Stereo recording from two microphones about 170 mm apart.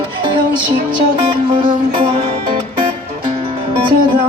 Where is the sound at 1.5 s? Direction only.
30° right (ahead or behind).